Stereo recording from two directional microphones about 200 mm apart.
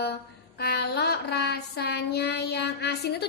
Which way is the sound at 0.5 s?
50° left (ahead or behind).